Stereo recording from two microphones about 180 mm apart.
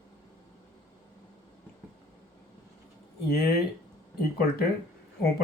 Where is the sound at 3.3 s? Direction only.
60° left (ahead or behind).